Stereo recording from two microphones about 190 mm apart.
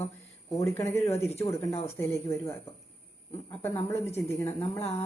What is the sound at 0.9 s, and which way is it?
Speech, 35° left (ahead or behind).